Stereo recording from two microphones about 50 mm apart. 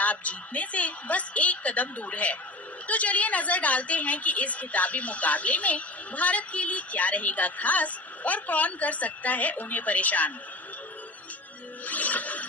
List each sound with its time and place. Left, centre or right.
0.0 s a woman's voice: left
11.9 s music: left